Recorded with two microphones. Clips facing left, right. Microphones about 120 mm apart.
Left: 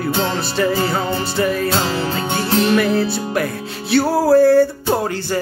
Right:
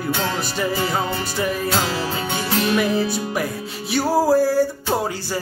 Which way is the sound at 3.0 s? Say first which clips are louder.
Left 3 dB; 15° right (ahead or behind).